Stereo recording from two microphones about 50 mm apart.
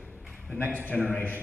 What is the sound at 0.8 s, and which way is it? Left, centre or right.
Speech, left.